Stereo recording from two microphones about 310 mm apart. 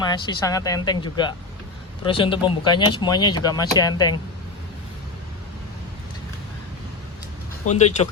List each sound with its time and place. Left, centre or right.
0.0 s speech: centre
7.7 s speech: left